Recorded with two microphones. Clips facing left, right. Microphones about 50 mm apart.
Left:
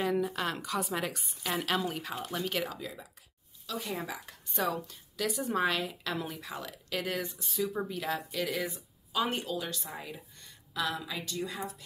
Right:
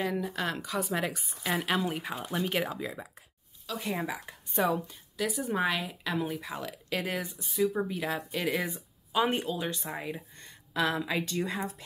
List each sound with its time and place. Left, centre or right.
0.0 s a woman's voice: centre
1.9 s speech: right
3.6 s speech: centre
4.0 s speech: right
5.1 s speech: centre
7.3 s speech: centre
8.3 s speech: right